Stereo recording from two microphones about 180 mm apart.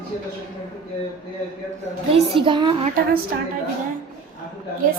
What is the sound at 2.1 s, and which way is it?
Speech, 30° right (ahead or behind).